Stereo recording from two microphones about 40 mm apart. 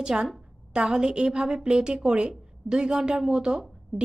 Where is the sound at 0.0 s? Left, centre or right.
Centre.